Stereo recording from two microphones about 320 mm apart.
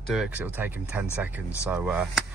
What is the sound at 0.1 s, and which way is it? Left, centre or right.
Speech, centre.